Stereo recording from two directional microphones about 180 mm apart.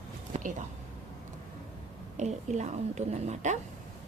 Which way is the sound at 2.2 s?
40° right (ahead or behind).